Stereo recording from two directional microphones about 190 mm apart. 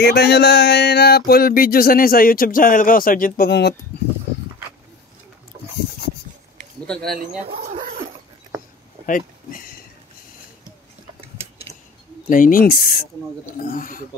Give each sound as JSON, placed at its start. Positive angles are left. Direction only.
{"t": 0.0, "sound": "speech", "side_deg": 60}
{"t": 6.9, "sound": "speech", "side_deg": 5}
{"t": 7.6, "sound": "dog", "side_deg": -45}
{"t": 9.0, "sound": "speech", "side_deg": 45}
{"t": 11.7, "sound": "a sound", "side_deg": -60}
{"t": 12.3, "sound": "speech", "side_deg": 45}